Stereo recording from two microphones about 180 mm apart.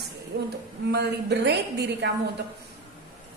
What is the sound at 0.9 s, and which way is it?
Speech, 65° right (ahead or behind).